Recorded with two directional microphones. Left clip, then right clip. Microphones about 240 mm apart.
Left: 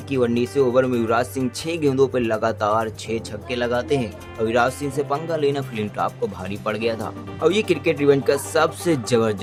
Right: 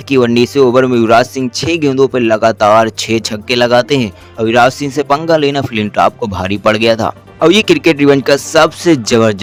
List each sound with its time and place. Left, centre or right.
0.1 s speech: right